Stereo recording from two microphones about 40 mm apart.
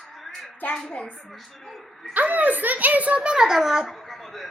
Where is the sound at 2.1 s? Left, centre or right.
Right.